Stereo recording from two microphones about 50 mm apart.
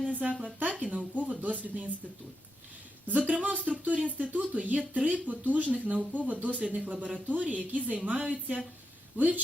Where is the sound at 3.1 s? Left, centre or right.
Right.